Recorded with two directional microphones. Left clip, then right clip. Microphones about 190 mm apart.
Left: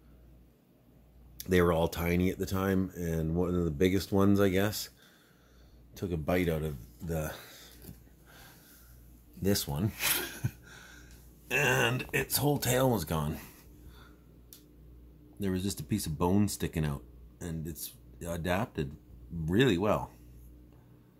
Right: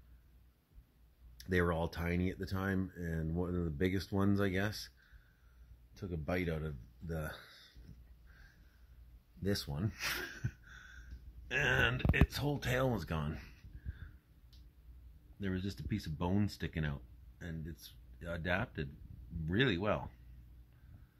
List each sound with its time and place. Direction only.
1.4 s speech: 10° left (ahead or behind)
5.9 s speech: 15° left (ahead or behind)
9.4 s speech: 10° left (ahead or behind)
15.4 s speech: 5° left (ahead or behind)